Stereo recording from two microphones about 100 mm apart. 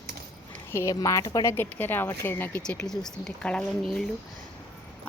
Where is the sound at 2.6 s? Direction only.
10° left (ahead or behind).